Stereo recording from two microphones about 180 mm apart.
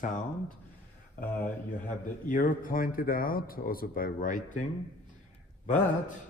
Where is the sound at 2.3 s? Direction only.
45° left (ahead or behind).